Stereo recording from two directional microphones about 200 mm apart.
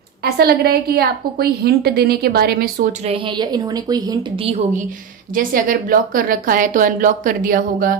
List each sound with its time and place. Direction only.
0.2 s a woman's voice: 50° right (ahead or behind)
3.1 s a woman's voice: 25° right (ahead or behind)
5.3 s a woman's voice: 45° right (ahead or behind)